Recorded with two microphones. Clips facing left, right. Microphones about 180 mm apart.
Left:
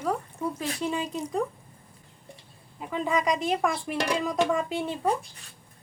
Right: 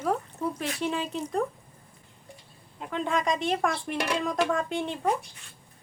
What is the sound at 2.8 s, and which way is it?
Speech, 5° left (ahead or behind).